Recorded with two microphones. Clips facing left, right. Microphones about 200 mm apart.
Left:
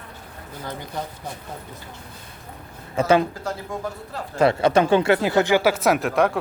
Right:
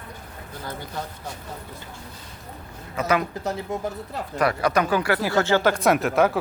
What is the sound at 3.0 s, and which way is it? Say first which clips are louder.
Speech: left 5 dB; 30° left (ahead or behind).